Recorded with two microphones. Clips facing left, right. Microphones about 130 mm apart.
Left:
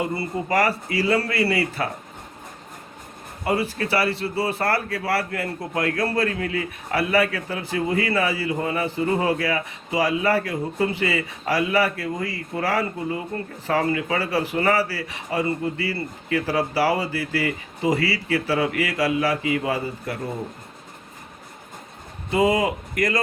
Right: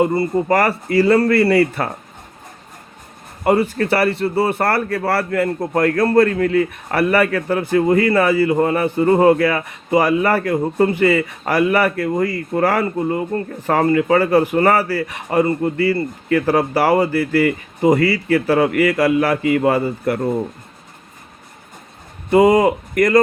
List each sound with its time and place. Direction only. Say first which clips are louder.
0.0 s a man's voice: right 9 dB; 45° right (ahead or behind)
3.4 s a man's voice: right 8 dB; 50° right (ahead or behind)
22.3 s a man's voice: right 8 dB; 50° right (ahead or behind)